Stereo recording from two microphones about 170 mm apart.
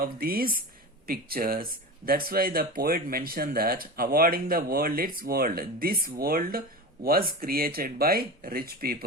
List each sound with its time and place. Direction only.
0.0 s speech: 60° right (ahead or behind)